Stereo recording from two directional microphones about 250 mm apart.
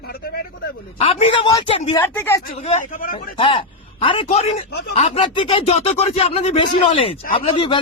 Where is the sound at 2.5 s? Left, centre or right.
Left.